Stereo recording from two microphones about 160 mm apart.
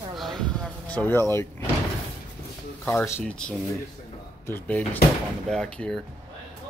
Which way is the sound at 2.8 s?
15° left (ahead or behind).